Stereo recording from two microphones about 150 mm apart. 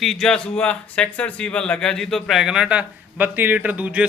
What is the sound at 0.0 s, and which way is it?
Speech, 5° left (ahead or behind).